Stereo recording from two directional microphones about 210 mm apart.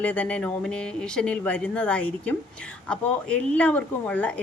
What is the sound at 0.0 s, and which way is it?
Speech, 5° left (ahead or behind).